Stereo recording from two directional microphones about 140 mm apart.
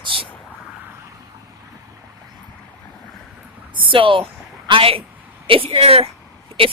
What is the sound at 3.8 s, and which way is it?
A woman's voice, 40° right (ahead or behind).